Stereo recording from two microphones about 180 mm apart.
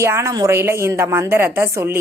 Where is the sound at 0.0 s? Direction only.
15° right (ahead or behind).